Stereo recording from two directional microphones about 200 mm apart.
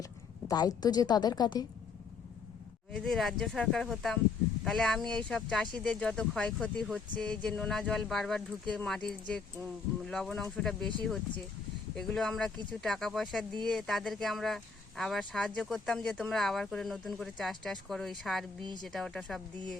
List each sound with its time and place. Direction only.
0.4 s a woman's voice: 20° left (ahead or behind)
2.9 s speech: 5° left (ahead or behind)